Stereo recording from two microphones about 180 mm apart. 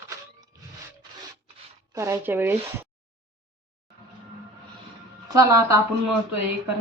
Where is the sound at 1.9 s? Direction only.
15° right (ahead or behind).